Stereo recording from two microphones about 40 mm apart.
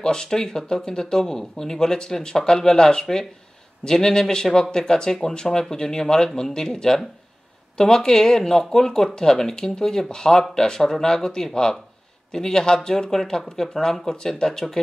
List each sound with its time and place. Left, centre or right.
0.0 s speech: centre